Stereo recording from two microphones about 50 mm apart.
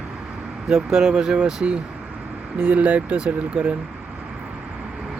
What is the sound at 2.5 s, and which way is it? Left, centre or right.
Speech, right.